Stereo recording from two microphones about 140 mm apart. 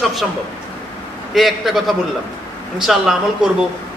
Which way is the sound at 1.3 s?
Centre (ahead or behind).